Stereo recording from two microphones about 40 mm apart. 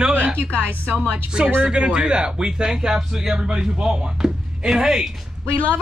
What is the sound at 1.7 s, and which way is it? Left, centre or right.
Speech, right.